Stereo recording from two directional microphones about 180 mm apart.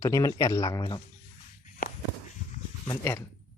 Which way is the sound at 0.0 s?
20° left (ahead or behind).